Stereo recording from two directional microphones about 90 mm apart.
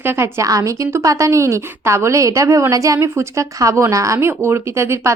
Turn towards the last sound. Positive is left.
turn(degrees=-30)  # may be behind; listen again after turning